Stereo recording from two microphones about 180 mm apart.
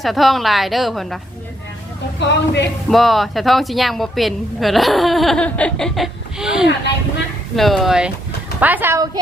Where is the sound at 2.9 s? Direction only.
Centre (ahead or behind).